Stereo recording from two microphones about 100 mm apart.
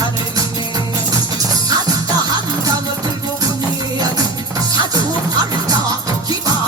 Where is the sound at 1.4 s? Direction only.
40° right (ahead or behind).